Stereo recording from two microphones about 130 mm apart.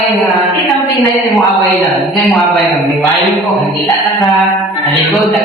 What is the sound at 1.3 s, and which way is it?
Mantra, centre (ahead or behind).